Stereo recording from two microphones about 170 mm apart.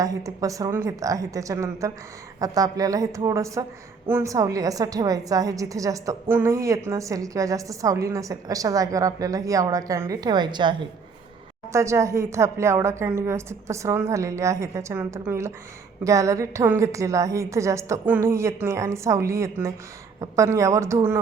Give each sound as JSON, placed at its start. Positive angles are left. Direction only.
{"t": 0.0, "sound": "a woman's voice", "side_deg": -20}